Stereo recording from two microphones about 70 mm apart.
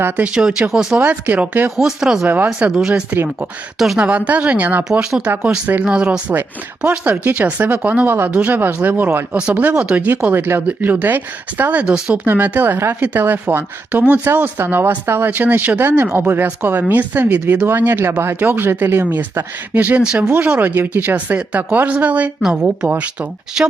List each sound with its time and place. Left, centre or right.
0.3 s speech: centre
0.9 s a woman's voice: right
1.7 s speech: centre
2.2 s a woman's voice: right; by 4.0 s centre
4.3 s a woman's voice: right
4.8 s a woman's voice: centre
11.9 s speech: centre
12.2 s a woman's voice: right
22.4 s speech: centre